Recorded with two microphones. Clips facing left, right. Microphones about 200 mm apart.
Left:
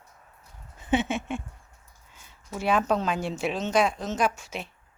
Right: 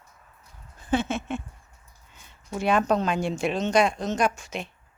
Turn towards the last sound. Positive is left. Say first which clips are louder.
# right 1 dB
turn(degrees=5)  # may be behind; listen again after turning